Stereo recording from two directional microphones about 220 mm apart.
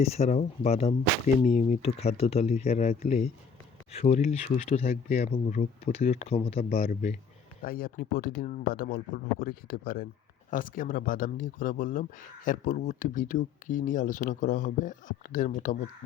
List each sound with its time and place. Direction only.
0.0 s speech: 30° left (ahead or behind)
7.6 s speech: 40° left (ahead or behind)